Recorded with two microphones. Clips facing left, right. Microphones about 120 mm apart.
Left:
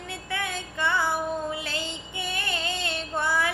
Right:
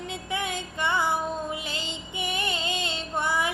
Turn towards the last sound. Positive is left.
turn(degrees=-20)  # may be behind; listen again after turning